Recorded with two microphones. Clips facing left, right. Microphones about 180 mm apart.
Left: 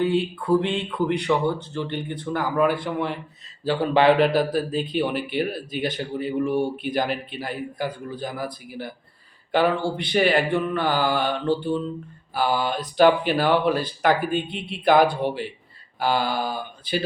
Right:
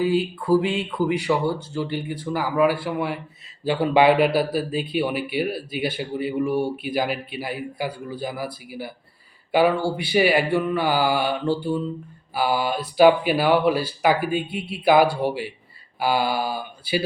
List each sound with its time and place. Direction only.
0.0 s a man's voice: 5° right (ahead or behind)